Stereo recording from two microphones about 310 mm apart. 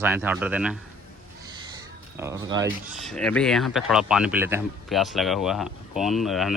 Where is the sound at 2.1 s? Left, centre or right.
Centre.